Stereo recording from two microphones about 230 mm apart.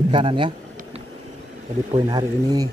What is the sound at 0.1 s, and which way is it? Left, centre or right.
Speech, right.